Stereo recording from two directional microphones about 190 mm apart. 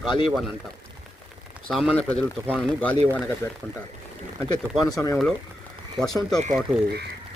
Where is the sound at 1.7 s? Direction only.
5° left (ahead or behind).